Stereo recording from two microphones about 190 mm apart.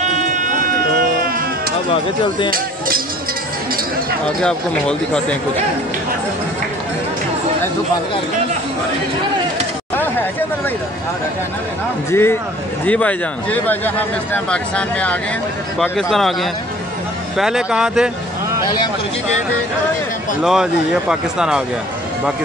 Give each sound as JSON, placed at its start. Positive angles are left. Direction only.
{"t": 0.0, "sound": "a sound", "side_deg": -40}
{"t": 4.4, "sound": "speech", "side_deg": 5}
{"t": 12.1, "sound": "speech", "side_deg": 10}
{"t": 20.4, "sound": "speech", "side_deg": -5}